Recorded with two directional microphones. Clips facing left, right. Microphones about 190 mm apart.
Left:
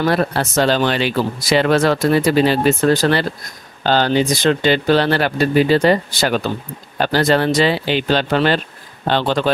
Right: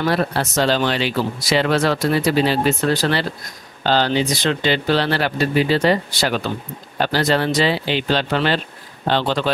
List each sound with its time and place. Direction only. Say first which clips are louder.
0.0 s speech: left 2 dB; 55° left (ahead or behind)